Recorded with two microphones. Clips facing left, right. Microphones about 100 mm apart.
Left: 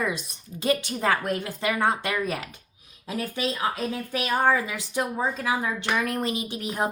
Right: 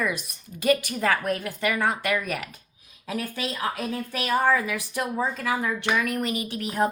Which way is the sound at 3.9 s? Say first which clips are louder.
Right 1 dB; 20° left (ahead or behind).